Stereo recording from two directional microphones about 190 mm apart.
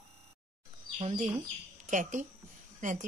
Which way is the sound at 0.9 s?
35° right (ahead or behind).